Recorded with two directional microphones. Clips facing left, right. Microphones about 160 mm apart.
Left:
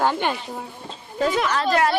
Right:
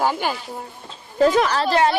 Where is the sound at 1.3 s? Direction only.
35° right (ahead or behind).